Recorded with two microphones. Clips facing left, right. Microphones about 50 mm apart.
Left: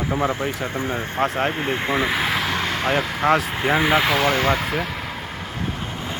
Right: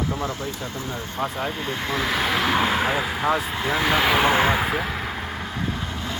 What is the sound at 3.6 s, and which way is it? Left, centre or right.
Speech, centre.